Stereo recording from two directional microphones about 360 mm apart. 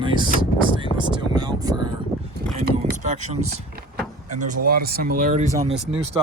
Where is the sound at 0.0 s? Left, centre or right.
Centre.